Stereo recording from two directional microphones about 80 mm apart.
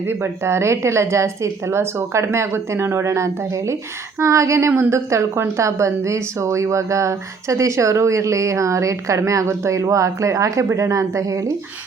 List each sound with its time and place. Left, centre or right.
0.0 s a woman's voice: right